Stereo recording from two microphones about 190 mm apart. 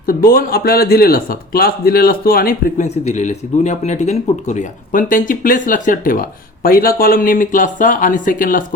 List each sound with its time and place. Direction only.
0.0 s a man's voice: 50° left (ahead or behind)